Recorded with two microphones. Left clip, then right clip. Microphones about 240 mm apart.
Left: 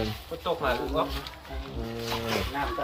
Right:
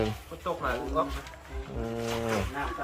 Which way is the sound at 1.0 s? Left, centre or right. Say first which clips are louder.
Right 3 dB; left.